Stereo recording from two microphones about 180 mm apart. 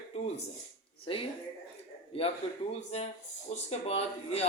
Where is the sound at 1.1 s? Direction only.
30° left (ahead or behind).